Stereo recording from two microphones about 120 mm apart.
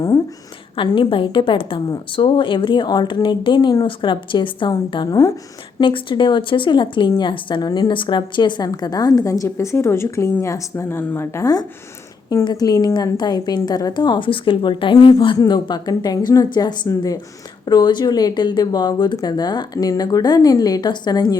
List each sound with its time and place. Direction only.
0.8 s a woman's voice: 45° left (ahead or behind)
5.0 s speech: 30° left (ahead or behind)
5.8 s a woman's voice: 45° left (ahead or behind)